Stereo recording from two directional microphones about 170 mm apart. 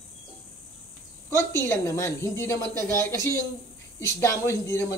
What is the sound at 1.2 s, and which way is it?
A man's voice, 15° left (ahead or behind).